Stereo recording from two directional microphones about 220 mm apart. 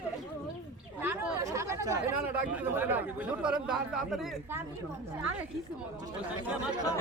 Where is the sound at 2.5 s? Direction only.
10° right (ahead or behind).